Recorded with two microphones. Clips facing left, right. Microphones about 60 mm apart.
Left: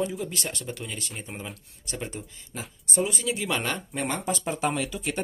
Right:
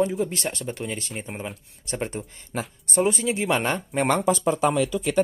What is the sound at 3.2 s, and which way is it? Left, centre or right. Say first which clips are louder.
Speech: right 5 dB; right.